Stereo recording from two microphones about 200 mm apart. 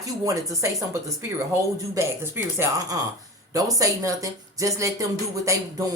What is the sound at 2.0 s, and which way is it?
Speech, 15° right (ahead or behind).